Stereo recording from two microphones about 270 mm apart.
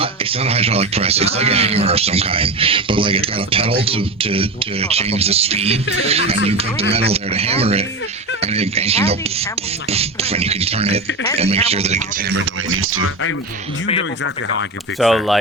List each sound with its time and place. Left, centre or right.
0.0 s speech: right
12.3 s speech: right
14.9 s speech: centre